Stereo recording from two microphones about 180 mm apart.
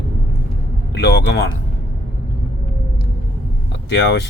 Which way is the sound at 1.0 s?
65° left (ahead or behind).